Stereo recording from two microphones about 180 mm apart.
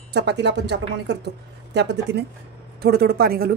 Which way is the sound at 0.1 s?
70° right (ahead or behind).